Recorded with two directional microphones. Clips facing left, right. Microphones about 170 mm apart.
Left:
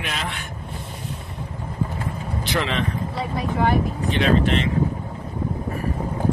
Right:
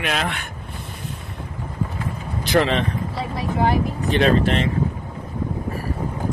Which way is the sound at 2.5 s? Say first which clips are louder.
Right 6 dB; 35° right (ahead or behind).